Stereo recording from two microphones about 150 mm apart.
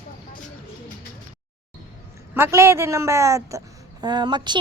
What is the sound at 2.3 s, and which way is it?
A woman's voice, 15° right (ahead or behind).